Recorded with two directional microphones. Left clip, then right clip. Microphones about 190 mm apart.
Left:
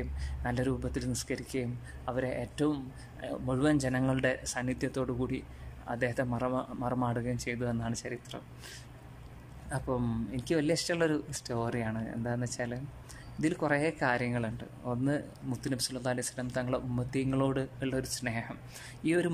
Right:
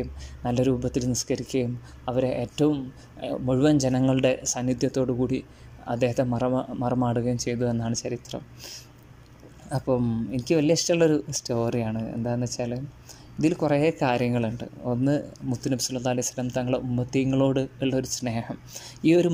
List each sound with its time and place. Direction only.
0.0 s speech: 15° right (ahead or behind)